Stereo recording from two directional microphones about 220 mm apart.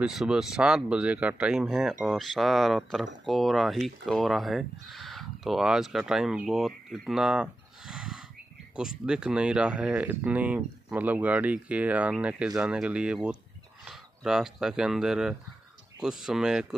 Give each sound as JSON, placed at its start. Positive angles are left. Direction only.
{"t": 0.0, "sound": "speech", "side_deg": 0}